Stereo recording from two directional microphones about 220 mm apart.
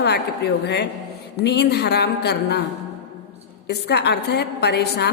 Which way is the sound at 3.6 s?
50° left (ahead or behind).